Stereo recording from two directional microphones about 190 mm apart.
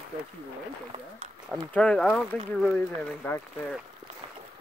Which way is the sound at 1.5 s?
5° left (ahead or behind).